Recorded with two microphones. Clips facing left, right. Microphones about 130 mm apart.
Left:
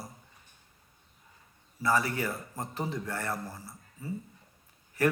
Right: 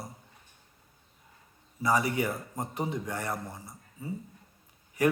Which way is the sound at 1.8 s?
15° right (ahead or behind).